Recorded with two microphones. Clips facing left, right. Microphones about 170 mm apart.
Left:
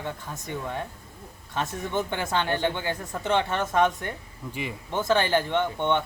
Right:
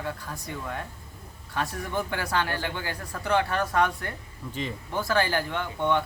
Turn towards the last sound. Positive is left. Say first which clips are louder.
# left 2 dB
turn(degrees=25)  # may be behind; listen again after turning